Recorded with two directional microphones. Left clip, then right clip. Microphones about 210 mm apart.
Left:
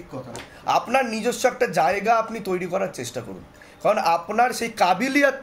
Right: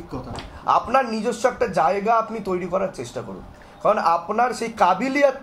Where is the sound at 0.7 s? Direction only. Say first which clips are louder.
Right 2 dB; 35° left (ahead or behind).